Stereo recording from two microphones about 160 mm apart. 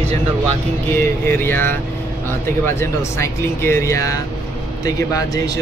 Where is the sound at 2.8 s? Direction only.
15° left (ahead or behind).